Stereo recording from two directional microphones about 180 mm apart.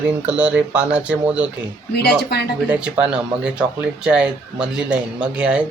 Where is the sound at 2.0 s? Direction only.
65° left (ahead or behind).